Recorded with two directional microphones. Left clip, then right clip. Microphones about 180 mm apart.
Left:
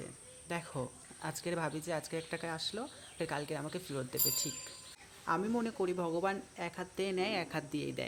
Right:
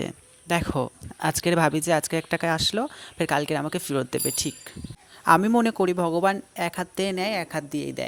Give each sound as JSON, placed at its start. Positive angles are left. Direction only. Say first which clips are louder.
{"t": 0.0, "sound": "speech", "louder": "right 15 dB", "side_deg": -45}